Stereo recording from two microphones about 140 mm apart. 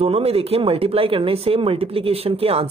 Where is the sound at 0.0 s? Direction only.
45° right (ahead or behind).